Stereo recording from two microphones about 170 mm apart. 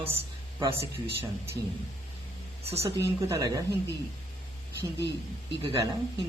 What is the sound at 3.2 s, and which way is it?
Speech, 20° right (ahead or behind).